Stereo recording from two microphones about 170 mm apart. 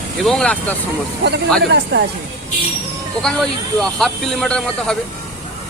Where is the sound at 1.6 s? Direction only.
80° right.